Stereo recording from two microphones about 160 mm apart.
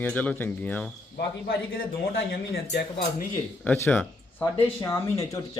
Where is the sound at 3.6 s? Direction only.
10° left (ahead or behind).